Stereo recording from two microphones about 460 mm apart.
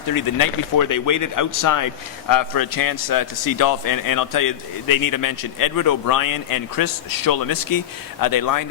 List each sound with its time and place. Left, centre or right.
0.1 s a man's voice: left